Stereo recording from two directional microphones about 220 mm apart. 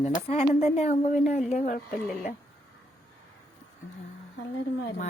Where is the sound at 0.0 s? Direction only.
30° left (ahead or behind).